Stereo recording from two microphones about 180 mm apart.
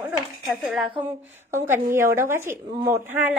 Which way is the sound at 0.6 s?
Centre (ahead or behind).